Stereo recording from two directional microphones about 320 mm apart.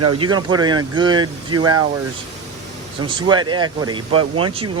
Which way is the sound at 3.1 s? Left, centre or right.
Centre.